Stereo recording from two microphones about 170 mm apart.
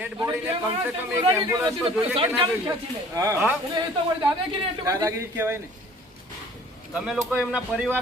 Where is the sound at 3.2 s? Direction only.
20° right (ahead or behind).